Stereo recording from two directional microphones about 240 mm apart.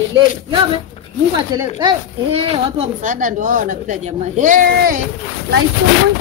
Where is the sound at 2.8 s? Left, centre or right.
Right.